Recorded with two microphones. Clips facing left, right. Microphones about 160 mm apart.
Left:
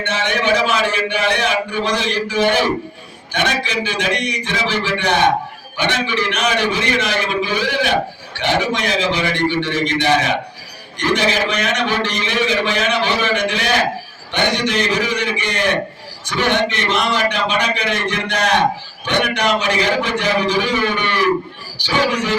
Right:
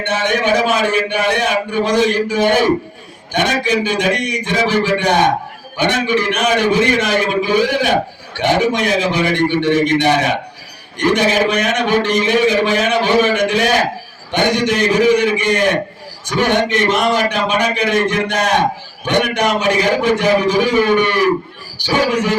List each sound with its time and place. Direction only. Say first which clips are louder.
0.0 s a man's voice: right 3 dB; 50° right (ahead or behind)